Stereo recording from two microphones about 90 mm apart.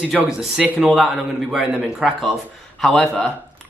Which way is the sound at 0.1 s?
5° right (ahead or behind).